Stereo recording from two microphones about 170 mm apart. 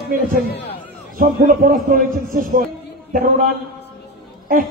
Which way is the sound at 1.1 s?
50° right (ahead or behind).